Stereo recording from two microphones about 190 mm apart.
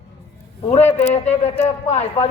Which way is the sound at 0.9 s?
35° left (ahead or behind).